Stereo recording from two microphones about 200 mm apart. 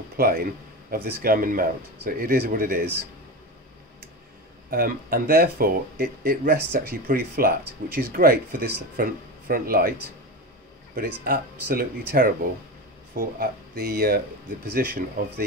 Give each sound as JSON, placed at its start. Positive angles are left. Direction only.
{"t": 0.8, "sound": "speech", "side_deg": -45}
{"t": 4.6, "sound": "speech", "side_deg": -45}
{"t": 11.0, "sound": "speech", "side_deg": -45}